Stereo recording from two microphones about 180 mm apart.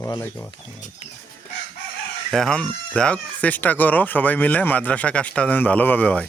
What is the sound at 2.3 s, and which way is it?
Speech, 5° left (ahead or behind).